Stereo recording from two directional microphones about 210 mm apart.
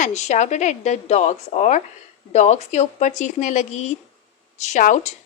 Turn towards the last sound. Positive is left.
turn(degrees=35)  # may be behind; listen again after turning